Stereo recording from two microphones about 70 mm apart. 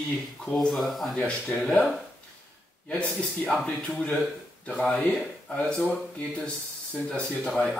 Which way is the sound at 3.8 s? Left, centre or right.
Centre.